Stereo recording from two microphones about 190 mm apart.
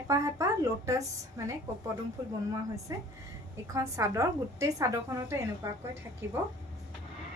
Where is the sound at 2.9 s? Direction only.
20° right (ahead or behind).